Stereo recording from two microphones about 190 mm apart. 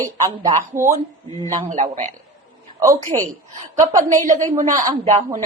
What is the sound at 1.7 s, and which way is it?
Speech, 40° right (ahead or behind).